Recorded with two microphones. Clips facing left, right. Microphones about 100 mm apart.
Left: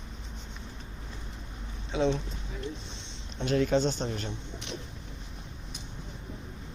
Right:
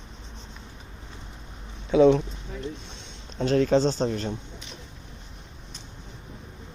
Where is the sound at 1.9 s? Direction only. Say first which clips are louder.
Right 11 dB; 55° right (ahead or behind).